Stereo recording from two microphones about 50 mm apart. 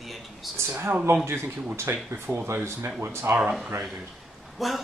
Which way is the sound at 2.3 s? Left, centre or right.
Right.